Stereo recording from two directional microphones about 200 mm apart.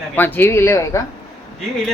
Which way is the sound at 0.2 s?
10° left (ahead or behind).